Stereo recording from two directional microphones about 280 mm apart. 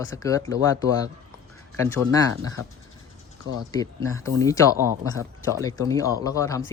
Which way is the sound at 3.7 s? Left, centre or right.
Centre.